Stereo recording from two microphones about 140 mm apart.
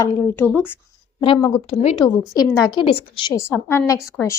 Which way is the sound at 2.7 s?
40° left (ahead or behind).